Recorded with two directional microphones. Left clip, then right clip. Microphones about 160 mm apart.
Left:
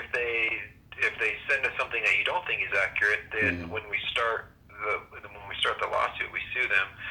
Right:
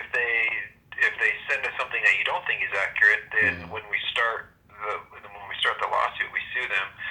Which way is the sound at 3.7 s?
10° left (ahead or behind).